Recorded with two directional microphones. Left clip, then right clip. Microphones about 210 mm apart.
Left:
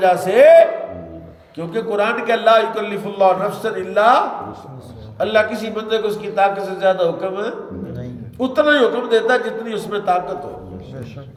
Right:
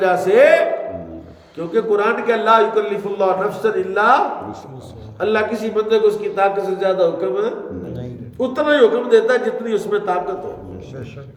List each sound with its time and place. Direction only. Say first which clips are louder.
0.0 s a man's voice: left 1 dB; 15° right (ahead or behind)